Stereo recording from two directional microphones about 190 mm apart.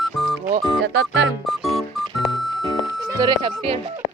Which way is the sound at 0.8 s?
90° right.